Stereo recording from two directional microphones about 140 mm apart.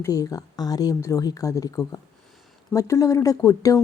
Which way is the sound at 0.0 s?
25° left (ahead or behind).